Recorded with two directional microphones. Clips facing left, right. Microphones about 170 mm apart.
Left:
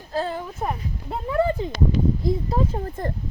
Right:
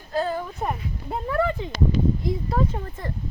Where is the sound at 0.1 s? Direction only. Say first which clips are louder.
Right 1 dB; 30° left (ahead or behind).